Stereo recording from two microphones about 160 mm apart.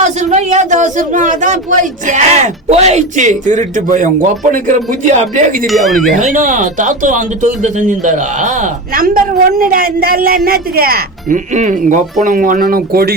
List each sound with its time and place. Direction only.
0.0 s speech: 45° right (ahead or behind)
5.6 s speech: centre (ahead or behind)
6.1 s speech: 55° right (ahead or behind); by 11.3 s 70° right (ahead or behind)
11.5 s speech: 55° right (ahead or behind); by 13.1 s 70° right (ahead or behind)